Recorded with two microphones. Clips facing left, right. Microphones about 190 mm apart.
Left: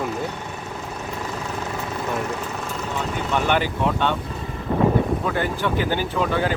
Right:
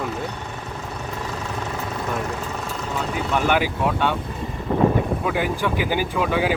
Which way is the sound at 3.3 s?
10° right (ahead or behind).